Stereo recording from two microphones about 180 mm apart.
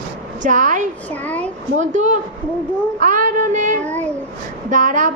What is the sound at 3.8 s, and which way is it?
Speech, 10° left (ahead or behind).